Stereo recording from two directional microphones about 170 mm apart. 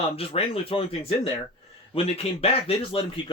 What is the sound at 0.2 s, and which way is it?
Speech, 35° left (ahead or behind).